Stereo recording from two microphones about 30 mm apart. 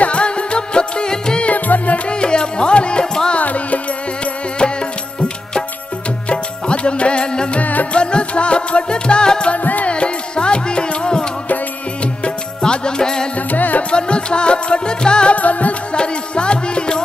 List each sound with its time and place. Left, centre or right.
0.0 s music: left
1.5 s music: left
2.0 s music: left
3.3 s music: left
6.2 s music: left
12.6 s music: left
13.5 s music: left
13.9 s music: left
15.3 s music: left
15.9 s music: left